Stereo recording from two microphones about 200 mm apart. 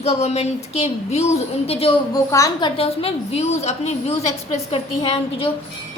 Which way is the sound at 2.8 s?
30° left (ahead or behind).